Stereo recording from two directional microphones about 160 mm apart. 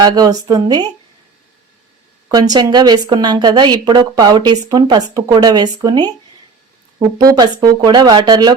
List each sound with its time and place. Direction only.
0.0 s a woman's voice: 25° right (ahead or behind)
2.3 s a woman's voice: 25° right (ahead or behind)
7.2 s a woman's voice: 20° right (ahead or behind)